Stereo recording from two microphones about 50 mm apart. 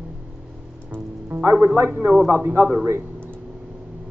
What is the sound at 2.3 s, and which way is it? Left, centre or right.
Speech, right.